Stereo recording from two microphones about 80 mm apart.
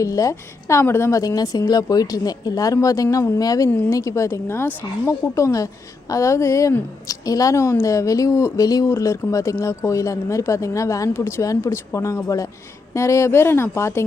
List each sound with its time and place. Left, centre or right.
0.0 s a woman's voice: left
1.4 s a woman's voice: left